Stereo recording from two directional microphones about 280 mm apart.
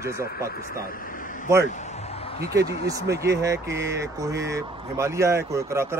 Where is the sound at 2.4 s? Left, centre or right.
Centre.